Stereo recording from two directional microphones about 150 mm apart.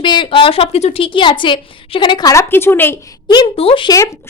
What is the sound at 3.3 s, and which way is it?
Speech, 35° left (ahead or behind).